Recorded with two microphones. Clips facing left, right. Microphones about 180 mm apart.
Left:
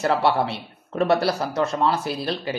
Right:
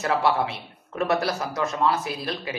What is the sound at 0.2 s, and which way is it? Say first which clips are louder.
A man's voice: left 2 dB; 30° left (ahead or behind).